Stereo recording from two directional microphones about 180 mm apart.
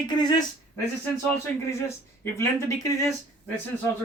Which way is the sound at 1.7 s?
15° left (ahead or behind).